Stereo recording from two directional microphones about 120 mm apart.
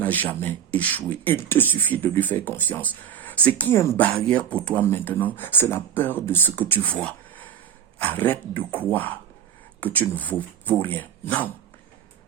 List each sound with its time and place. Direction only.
0.0 s speech: 15° left (ahead or behind)
7.9 s speech: 15° left (ahead or behind)